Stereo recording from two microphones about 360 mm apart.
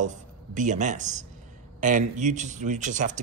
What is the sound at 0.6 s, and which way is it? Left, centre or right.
Speech, centre.